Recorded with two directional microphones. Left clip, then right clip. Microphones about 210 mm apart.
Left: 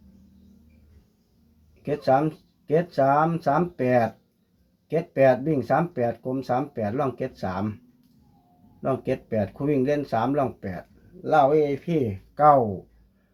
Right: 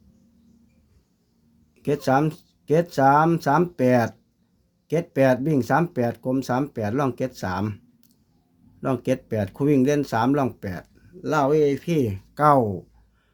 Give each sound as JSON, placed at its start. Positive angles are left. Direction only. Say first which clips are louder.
{"t": 1.8, "sound": "speech", "louder": "even", "side_deg": -55}
{"t": 8.8, "sound": "speech", "louder": "right 2 dB", "side_deg": -55}